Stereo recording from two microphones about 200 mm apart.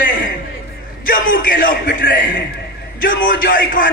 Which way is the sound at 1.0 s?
45° left (ahead or behind).